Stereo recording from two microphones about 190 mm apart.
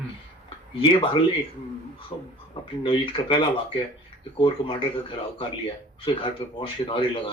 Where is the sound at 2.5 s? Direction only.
25° left (ahead or behind).